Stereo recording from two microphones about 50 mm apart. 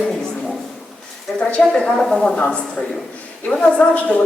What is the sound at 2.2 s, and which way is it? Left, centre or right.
A woman's voice, left.